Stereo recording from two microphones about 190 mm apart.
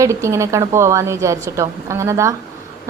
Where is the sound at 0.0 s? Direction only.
15° right (ahead or behind).